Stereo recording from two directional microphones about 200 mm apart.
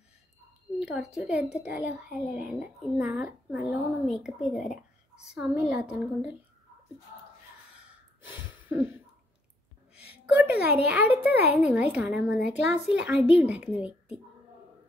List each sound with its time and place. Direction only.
0.7 s speech: 5° right (ahead or behind)
7.7 s gasp: 5° right (ahead or behind)
10.2 s speech: 5° right (ahead or behind)